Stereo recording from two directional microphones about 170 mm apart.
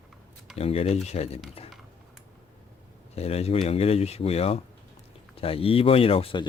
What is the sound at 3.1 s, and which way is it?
Speech, 35° left (ahead or behind).